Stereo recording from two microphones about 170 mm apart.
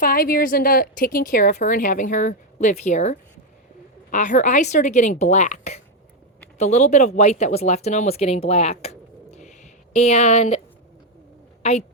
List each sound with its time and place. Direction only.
0.0 s a woman's voice: 60° left (ahead or behind); by 10.6 s 40° left (ahead or behind)
11.6 s a woman's voice: 35° left (ahead or behind)